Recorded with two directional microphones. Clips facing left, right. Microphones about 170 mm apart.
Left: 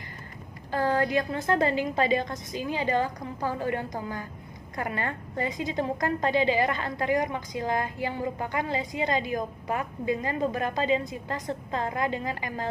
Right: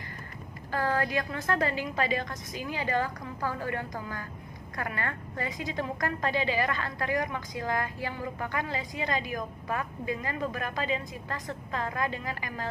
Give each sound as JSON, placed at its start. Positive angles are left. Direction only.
{"t": 0.7, "sound": "a woman's voice", "side_deg": 20}